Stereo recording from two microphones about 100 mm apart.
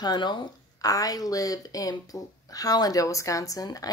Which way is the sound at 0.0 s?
45° left (ahead or behind).